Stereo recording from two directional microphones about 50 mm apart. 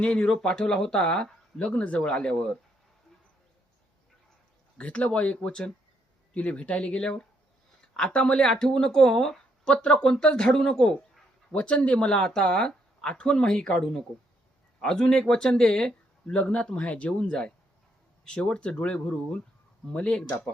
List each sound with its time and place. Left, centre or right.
0.0 s a woman's voice: left
4.8 s a woman's voice: left
11.5 s a woman's voice: left